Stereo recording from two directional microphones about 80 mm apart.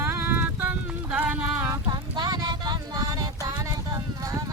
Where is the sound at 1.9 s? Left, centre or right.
Right.